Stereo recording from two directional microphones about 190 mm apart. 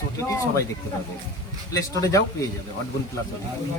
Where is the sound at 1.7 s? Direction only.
15° left (ahead or behind).